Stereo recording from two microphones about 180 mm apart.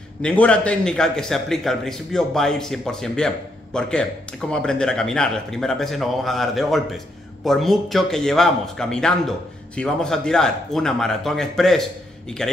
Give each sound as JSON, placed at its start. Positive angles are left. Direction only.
{"t": 0.2, "sound": "a man's voice", "side_deg": 5}